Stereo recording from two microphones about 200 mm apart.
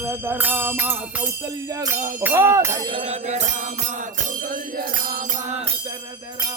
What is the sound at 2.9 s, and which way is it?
Bell, 35° right (ahead or behind).